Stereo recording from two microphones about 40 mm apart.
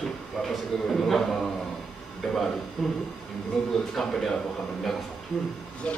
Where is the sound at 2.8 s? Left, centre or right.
Centre.